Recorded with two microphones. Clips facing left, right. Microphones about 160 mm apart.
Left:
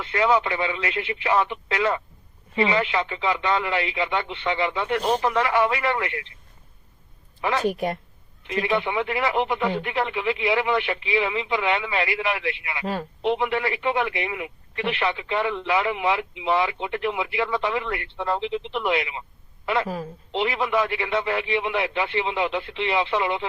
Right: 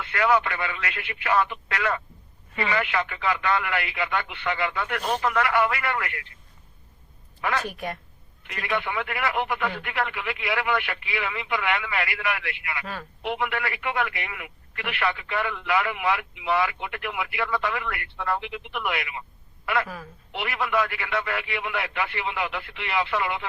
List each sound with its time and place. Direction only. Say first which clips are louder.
0.0 s speech: left 2 dB; 25° left (ahead or behind)
7.4 s speech: left 5 dB; 25° left (ahead or behind)